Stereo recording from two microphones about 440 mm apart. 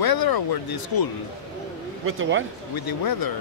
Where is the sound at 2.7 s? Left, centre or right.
Left.